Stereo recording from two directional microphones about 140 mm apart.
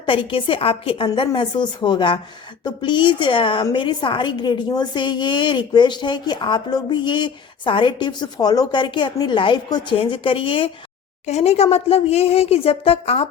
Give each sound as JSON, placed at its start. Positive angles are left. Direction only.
{"t": 0.0, "sound": "a woman's voice", "side_deg": 35}
{"t": 11.3, "sound": "a woman's voice", "side_deg": 50}